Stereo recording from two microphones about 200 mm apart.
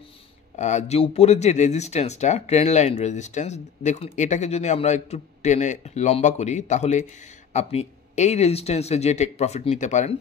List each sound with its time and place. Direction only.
0.6 s speech: 35° left (ahead or behind)